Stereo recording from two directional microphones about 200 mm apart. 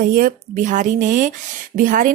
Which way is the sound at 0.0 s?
45° right (ahead or behind).